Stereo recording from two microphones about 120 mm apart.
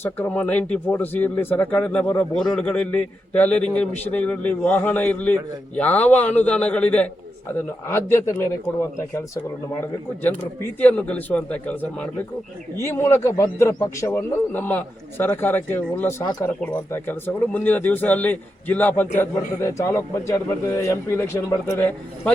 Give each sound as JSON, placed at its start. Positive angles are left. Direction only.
{"t": 0.0, "sound": "a man's voice", "side_deg": 15}